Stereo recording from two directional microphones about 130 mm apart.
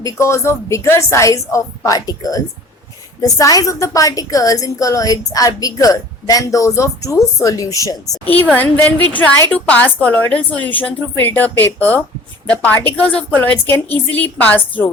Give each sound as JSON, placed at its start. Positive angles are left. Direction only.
{"t": 0.0, "sound": "a woman's voice", "side_deg": 25}
{"t": 8.2, "sound": "a woman's voice", "side_deg": 10}